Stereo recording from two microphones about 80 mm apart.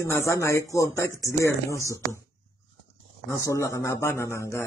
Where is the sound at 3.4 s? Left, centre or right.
Left.